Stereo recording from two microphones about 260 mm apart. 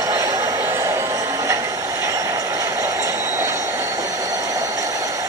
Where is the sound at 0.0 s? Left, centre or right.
Centre.